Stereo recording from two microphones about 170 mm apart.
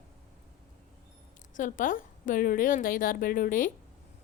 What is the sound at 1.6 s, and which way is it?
A woman's voice, 50° left (ahead or behind).